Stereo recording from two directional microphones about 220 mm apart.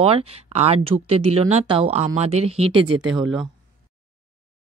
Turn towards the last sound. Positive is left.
turn(degrees=0)  # may be behind; listen again after turning